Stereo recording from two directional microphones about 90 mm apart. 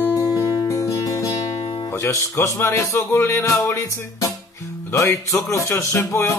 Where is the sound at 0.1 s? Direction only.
35° left (ahead or behind).